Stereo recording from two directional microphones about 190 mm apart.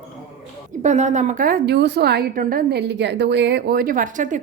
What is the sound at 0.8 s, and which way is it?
A woman's voice, 40° right (ahead or behind).